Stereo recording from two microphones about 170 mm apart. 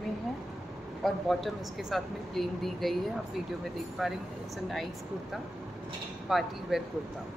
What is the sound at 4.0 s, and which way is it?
Speech, centre (ahead or behind).